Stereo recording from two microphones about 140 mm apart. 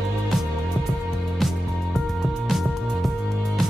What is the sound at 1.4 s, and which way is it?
Music, centre (ahead or behind).